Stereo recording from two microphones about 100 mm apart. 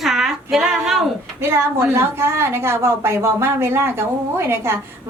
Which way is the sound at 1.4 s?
25° right (ahead or behind).